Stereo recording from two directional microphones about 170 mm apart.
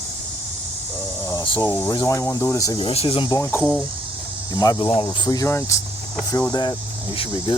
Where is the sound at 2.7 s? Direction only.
35° left (ahead or behind).